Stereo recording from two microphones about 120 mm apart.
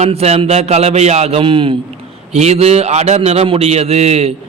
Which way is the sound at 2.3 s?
65° right (ahead or behind).